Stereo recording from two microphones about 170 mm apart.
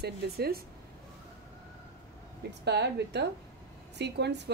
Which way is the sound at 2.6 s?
80° right.